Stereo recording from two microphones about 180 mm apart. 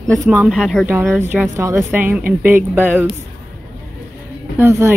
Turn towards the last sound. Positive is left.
turn(degrees=-15)  # may be behind; listen again after turning